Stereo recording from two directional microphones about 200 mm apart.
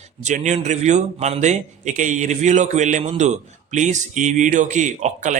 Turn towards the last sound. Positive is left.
turn(degrees=-35)  # may be behind; listen again after turning